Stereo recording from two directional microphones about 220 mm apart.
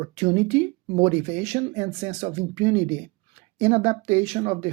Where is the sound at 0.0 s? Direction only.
30° right (ahead or behind).